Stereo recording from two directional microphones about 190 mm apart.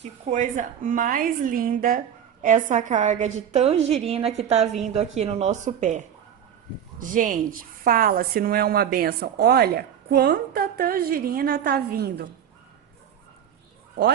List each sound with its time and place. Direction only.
0.0 s a woman's voice: 40° right (ahead or behind); by 12.3 s 55° right (ahead or behind)